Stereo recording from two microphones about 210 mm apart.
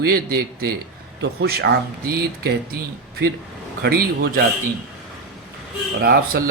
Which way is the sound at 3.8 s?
45° right (ahead or behind).